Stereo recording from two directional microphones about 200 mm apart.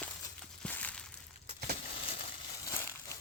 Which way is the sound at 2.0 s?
25° left (ahead or behind).